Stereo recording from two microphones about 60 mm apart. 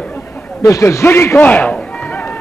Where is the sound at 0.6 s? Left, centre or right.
Left.